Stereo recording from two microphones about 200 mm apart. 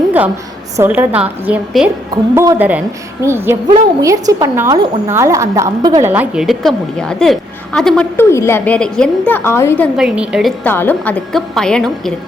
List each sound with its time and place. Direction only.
0.8 s a woman's voice: 10° right (ahead or behind)
6.1 s a woman's voice: 5° right (ahead or behind); by 9.9 s 10° left (ahead or behind)
10.0 s a woman's voice: 5° right (ahead or behind)
10.6 s a woman's voice: 10° left (ahead or behind)